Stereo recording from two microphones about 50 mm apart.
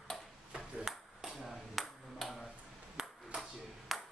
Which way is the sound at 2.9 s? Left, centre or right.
Centre.